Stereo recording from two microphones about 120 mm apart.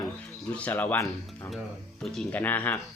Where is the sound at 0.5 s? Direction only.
15° left (ahead or behind).